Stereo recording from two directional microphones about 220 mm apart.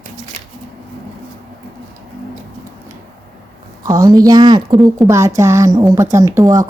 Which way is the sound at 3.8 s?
15° right (ahead or behind).